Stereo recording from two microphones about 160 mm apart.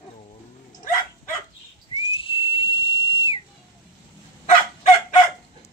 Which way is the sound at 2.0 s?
35° left (ahead or behind).